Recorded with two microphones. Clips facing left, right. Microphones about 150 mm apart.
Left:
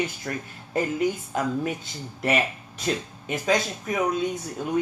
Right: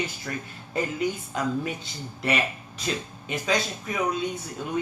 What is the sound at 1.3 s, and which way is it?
Speech, 50° left (ahead or behind).